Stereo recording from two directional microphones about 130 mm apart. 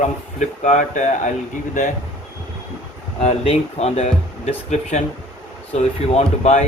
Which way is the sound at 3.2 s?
50° left (ahead or behind).